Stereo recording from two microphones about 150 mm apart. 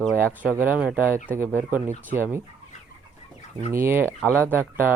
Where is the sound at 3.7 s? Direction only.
15° right (ahead or behind).